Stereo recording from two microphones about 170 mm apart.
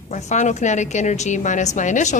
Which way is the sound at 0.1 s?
45° left (ahead or behind).